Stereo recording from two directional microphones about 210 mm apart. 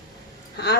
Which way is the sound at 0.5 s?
50° left (ahead or behind).